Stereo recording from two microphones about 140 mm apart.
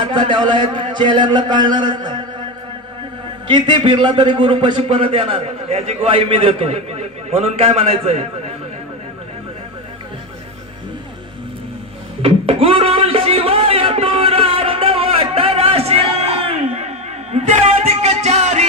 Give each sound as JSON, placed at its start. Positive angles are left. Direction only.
{"t": 0.1, "sound": "a man's voice", "side_deg": -35}
{"t": 3.4, "sound": "a man's voice", "side_deg": -35}
{"t": 12.2, "sound": "music", "side_deg": -40}